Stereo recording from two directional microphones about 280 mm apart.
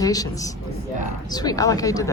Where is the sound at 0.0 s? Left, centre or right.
Centre.